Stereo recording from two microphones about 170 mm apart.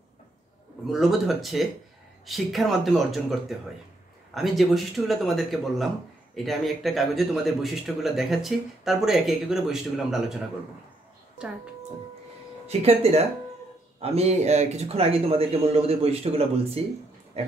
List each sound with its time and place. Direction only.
0.8 s speech: centre (ahead or behind)
11.4 s speech: 5° right (ahead or behind)
12.6 s speech: 35° right (ahead or behind)